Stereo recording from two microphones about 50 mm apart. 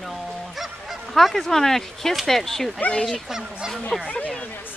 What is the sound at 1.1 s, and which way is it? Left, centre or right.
Speech, centre.